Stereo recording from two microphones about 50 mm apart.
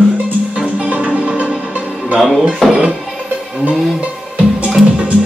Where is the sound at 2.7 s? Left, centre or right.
Centre.